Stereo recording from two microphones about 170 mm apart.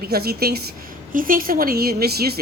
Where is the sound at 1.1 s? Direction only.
55° right (ahead or behind).